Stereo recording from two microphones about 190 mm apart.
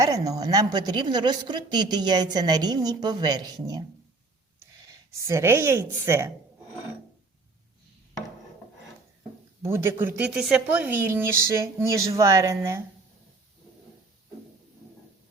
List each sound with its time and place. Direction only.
0.0 s a woman's voice: 20° right (ahead or behind)
5.1 s speech: 15° right (ahead or behind)
9.6 s speech: 15° right (ahead or behind)